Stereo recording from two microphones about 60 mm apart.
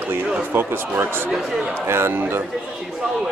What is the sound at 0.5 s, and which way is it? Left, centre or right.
A man's voice, right.